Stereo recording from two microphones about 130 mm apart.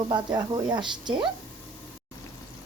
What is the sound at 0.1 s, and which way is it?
Speech, 35° right (ahead or behind).